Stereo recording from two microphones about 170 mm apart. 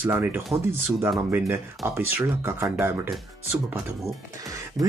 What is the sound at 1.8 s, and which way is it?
Speech, 15° right (ahead or behind).